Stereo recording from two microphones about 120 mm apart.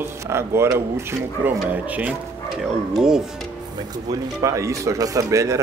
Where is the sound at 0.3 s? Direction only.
20° right (ahead or behind); by 3.2 s 5° right (ahead or behind).